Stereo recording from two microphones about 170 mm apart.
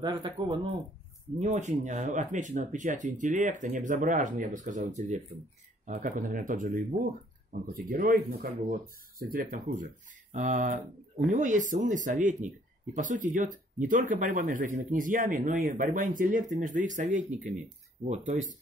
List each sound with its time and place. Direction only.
0.0 s speech: 25° right (ahead or behind)
1.4 s speech: 45° right (ahead or behind)